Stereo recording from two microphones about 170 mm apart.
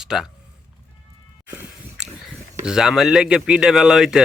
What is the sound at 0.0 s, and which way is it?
Speech, 5° right (ahead or behind).